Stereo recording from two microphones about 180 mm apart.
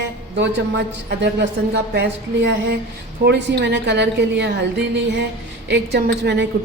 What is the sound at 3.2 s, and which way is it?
A woman's voice, 70° right (ahead or behind).